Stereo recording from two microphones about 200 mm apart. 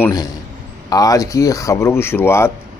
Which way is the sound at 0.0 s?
20° left (ahead or behind).